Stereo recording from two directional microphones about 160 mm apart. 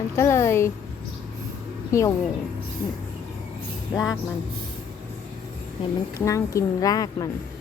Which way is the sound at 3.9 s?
20° left (ahead or behind).